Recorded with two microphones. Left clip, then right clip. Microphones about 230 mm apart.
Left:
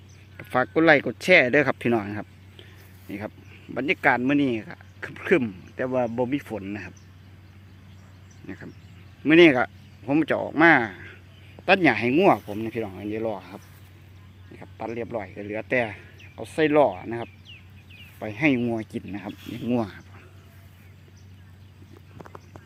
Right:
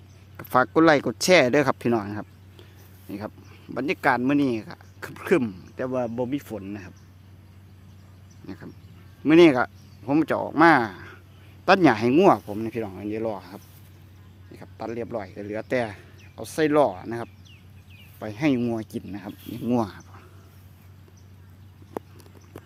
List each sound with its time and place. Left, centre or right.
0.3 s speech: centre
8.4 s speech: centre; by 12.4 s right
12.5 s speech: centre